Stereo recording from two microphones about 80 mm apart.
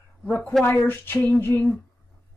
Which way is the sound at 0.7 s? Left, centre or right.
Left.